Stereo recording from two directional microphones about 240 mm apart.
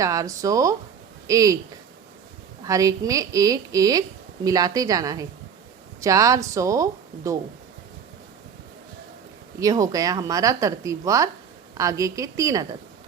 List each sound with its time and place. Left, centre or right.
0.0 s speech: centre
2.6 s speech: centre
9.6 s speech: centre